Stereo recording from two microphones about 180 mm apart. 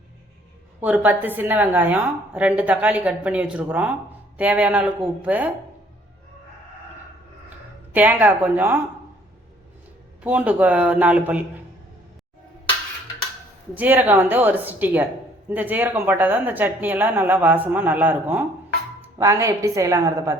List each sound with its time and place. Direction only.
0.8 s a woman's voice: 10° right (ahead or behind)
7.9 s a woman's voice: 10° right (ahead or behind)
10.2 s a woman's voice: 10° right (ahead or behind)
13.7 s a woman's voice: 10° right (ahead or behind)